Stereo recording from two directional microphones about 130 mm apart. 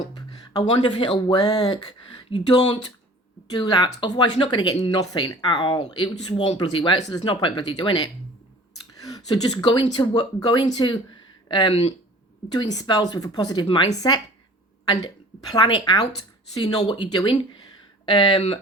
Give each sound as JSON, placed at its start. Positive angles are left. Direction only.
{"t": 0.8, "sound": "speech", "side_deg": 40}
{"t": 1.4, "sound": "speech", "side_deg": 30}
{"t": 11.7, "sound": "speech", "side_deg": 50}
{"t": 12.5, "sound": "speech", "side_deg": 30}